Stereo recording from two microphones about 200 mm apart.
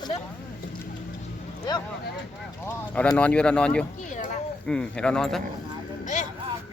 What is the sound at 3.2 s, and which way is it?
Speech, 5° left (ahead or behind).